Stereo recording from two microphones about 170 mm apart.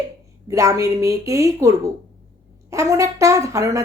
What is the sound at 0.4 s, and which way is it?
A woman's voice, 20° right (ahead or behind).